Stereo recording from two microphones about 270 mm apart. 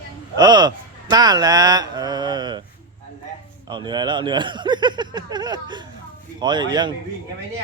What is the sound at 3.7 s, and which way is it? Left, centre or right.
Speech, centre.